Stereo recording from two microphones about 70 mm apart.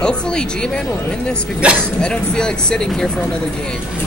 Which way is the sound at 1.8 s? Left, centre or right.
Centre.